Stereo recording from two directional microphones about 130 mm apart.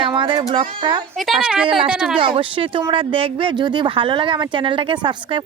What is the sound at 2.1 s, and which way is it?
Speech, 45° right (ahead or behind).